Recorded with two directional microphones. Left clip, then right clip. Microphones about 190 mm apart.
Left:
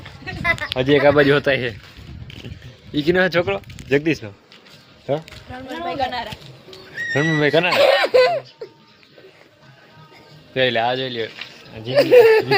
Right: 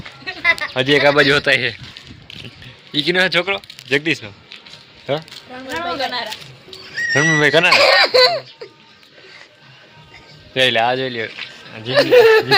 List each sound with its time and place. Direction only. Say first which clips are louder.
0.3 s a sound: right 4 dB; 15° left (ahead or behind)
0.8 s speech: even; 15° left (ahead or behind)
2.9 s speech: right 2 dB; 35° left (ahead or behind)
5.1 s speech: right 1 dB; 10° left (ahead or behind)
6.0 s speech: left 3 dB; 60° right (ahead or behind)
6.7 s music: right 5 dB; 20° left (ahead or behind)
7.1 s speech: right 4 dB; centre (ahead or behind)
7.7 s speech: right 3 dB; 15° left (ahead or behind)
10.5 s speech: right 3 dB; 5° left (ahead or behind)
10.9 s speech: right 2 dB; 25° right (ahead or behind)
11.9 s speech: right 1 dB; centre (ahead or behind)